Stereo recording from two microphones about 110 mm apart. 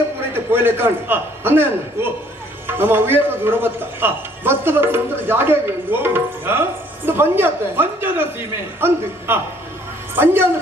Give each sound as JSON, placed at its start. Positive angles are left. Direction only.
{"t": 0.5, "sound": "a man's voice", "side_deg": -20}